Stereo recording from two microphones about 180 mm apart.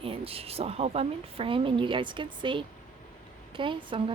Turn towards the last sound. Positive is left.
turn(degrees=-30)  # may be behind; listen again after turning